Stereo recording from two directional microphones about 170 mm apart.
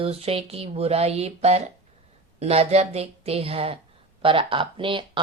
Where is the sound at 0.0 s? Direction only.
35° right (ahead or behind).